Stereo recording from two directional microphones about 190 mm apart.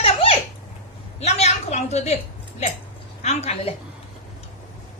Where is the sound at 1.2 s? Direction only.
35° left (ahead or behind).